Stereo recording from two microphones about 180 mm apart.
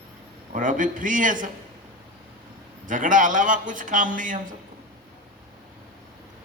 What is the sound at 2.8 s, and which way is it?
A man's voice, 45° right (ahead or behind).